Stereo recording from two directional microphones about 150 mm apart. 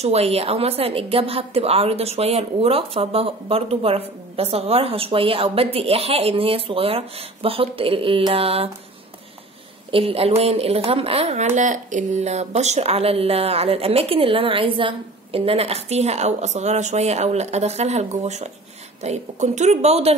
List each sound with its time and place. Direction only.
0.0 s a woman's voice: 45° right (ahead or behind)
9.8 s a woman's voice: 40° right (ahead or behind)